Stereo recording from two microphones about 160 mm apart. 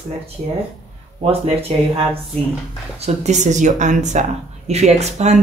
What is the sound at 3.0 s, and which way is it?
Speech, 45° right (ahead or behind).